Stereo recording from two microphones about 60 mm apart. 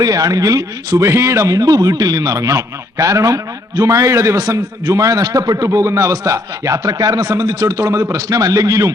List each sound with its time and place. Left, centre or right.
0.0 s a man's voice: right